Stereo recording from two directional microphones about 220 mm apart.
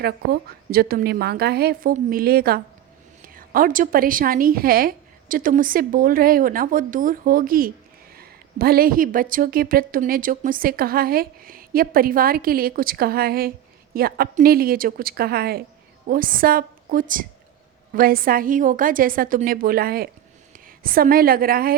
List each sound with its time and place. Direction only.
0.0 s a woman's voice: 45° right (ahead or behind)